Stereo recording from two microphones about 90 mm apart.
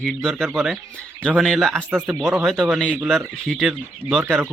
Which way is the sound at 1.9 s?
20° right (ahead or behind).